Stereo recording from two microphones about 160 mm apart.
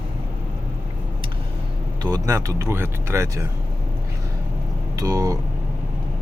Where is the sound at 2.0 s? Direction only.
20° right (ahead or behind).